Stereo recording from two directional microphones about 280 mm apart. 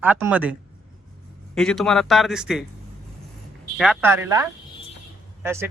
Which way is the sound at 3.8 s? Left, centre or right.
Centre.